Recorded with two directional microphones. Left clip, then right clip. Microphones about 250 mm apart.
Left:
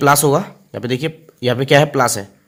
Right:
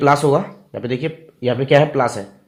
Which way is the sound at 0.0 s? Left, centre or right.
Left.